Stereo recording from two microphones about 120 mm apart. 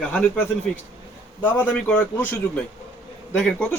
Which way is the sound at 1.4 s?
15° left (ahead or behind).